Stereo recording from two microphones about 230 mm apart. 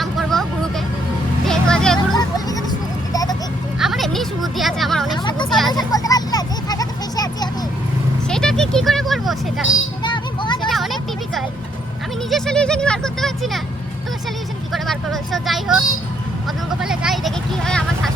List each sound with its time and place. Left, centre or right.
0.0 s vehicle: centre
1.5 s vehicle: centre
2.1 s a sound: centre
3.8 s a sound: centre
5.1 s vehicle: centre
5.5 s vehicle: centre
5.7 s a sound: centre
8.3 s vehicle: centre
10.0 s music: centre
10.7 s vehicle: centre
12.3 s a sound: centre
14.7 s vehicle: centre
16.8 s vehicle: centre